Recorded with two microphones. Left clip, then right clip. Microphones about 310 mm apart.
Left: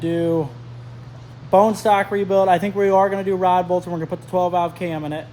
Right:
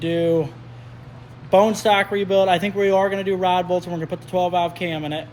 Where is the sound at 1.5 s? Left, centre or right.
Centre.